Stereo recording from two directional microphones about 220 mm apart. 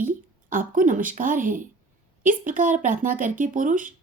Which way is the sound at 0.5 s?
40° right (ahead or behind).